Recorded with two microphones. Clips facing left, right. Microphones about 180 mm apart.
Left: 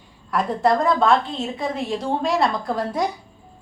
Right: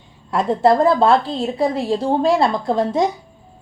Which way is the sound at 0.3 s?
25° right (ahead or behind).